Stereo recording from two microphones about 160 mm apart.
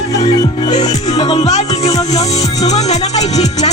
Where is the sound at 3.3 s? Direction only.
25° left (ahead or behind).